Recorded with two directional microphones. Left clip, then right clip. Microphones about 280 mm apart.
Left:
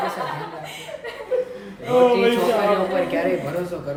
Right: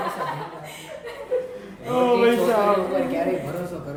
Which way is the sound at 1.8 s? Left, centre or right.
Centre.